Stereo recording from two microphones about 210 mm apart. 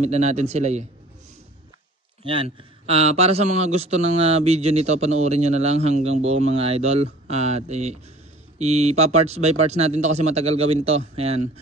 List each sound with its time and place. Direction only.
0.0 s a man's voice: 30° right (ahead or behind)
2.2 s a man's voice: 25° right (ahead or behind)